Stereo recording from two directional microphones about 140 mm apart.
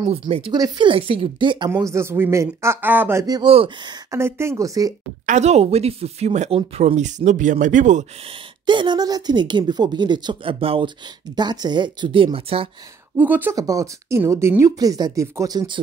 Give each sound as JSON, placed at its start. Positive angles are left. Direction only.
{"t": 0.5, "sound": "a woman's voice", "side_deg": -30}
{"t": 1.8, "sound": "speech", "side_deg": -20}
{"t": 3.4, "sound": "a woman's voice", "side_deg": -40}
{"t": 4.1, "sound": "speech", "side_deg": -20}
{"t": 5.2, "sound": "speech", "side_deg": -55}
{"t": 7.0, "sound": "speech", "side_deg": -60}
{"t": 8.6, "sound": "a woman's voice", "side_deg": -35}
{"t": 13.2, "sound": "speech", "side_deg": -15}
{"t": 13.6, "sound": "speech", "side_deg": -25}